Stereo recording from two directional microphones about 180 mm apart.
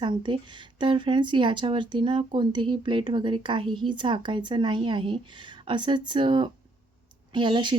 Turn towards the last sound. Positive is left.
turn(degrees=-25)  # may be behind; listen again after turning